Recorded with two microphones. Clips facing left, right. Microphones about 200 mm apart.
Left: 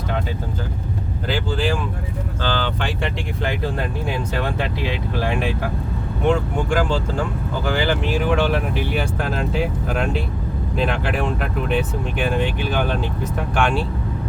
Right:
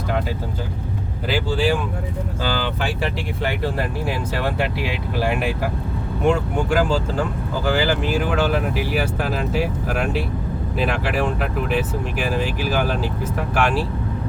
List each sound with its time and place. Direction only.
1.3 s speech: 10° right (ahead or behind)